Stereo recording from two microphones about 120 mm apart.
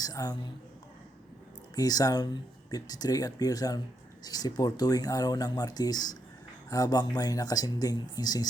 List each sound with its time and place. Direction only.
0.0 s speech: 30° left (ahead or behind)
1.7 s speech: 30° left (ahead or behind)